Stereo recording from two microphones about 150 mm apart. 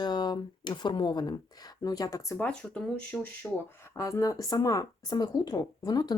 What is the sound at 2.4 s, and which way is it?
Speech, 5° left (ahead or behind).